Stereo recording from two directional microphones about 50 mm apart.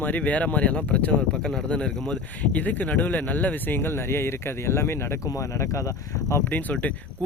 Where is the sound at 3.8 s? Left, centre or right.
Left.